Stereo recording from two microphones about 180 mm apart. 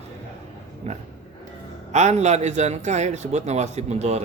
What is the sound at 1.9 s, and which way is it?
Speech, 40° right (ahead or behind).